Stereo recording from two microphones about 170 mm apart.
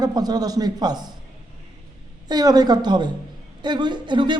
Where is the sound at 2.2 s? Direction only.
25° right (ahead or behind).